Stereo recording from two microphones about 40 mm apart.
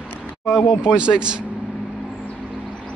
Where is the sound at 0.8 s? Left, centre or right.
Right.